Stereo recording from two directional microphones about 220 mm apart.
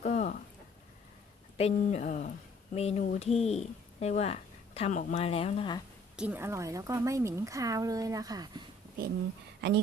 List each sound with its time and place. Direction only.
0.0 s a sound: 35° left (ahead or behind)
1.5 s speech: 30° left (ahead or behind)
6.1 s a woman's voice: 5° right (ahead or behind)